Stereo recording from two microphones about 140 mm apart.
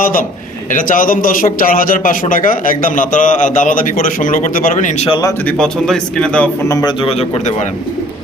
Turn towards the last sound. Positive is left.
turn(degrees=50)  # may be behind; listen again after turning